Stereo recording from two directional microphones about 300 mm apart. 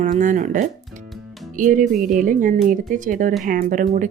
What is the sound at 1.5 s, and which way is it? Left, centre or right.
Speech, right.